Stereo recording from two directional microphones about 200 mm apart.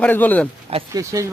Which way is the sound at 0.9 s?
15° right (ahead or behind).